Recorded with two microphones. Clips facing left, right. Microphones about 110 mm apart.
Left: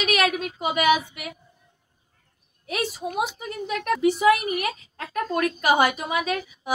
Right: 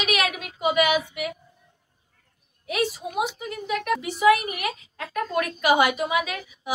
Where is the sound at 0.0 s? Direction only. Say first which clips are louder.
Left 3 dB; 40° left (ahead or behind).